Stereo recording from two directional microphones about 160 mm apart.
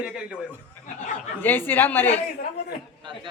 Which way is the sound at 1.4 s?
10° left (ahead or behind).